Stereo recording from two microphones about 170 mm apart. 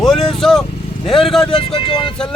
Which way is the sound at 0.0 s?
Centre (ahead or behind).